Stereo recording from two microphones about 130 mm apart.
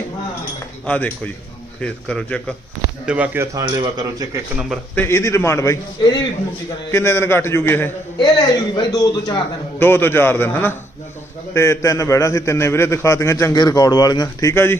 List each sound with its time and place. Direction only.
0.9 s a man's voice: 10° left (ahead or behind)
3.1 s speech: 10° right (ahead or behind)
3.5 s speech: 30° right (ahead or behind)
4.9 s a man's voice: 20° left (ahead or behind)
8.2 s a man's voice: 30° left (ahead or behind)
9.7 s a man's voice: 15° left (ahead or behind)
14.5 s a man's voice: 20° left (ahead or behind)